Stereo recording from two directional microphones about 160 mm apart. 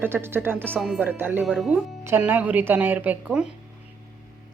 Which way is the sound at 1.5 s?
Centre (ahead or behind).